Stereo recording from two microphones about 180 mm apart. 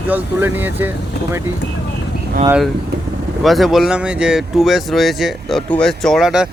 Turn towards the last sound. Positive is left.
turn(degrees=0)  # may be behind; listen again after turning